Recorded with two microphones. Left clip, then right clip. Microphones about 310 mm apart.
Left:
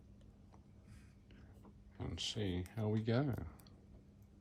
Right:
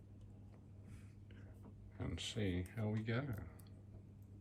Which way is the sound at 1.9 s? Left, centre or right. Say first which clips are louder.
Left 3 dB; centre.